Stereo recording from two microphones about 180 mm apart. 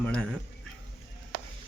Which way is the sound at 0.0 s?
5° left (ahead or behind).